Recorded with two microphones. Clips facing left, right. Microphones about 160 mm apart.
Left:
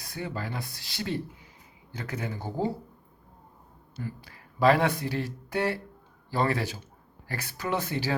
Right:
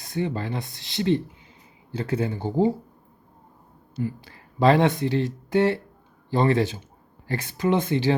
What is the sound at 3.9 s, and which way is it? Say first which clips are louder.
Speech: right 9 dB; 25° right (ahead or behind).